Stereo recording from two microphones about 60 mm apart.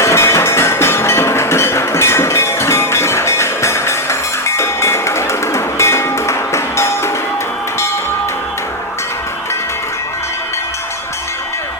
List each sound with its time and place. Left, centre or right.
0.0 s music: left